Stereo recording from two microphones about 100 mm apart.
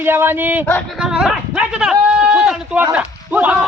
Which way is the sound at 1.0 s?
5° right (ahead or behind).